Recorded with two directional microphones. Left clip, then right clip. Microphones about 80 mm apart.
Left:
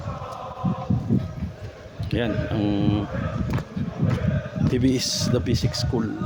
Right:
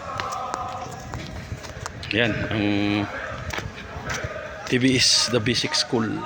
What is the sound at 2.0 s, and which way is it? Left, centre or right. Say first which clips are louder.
Speech: right 4 dB; left.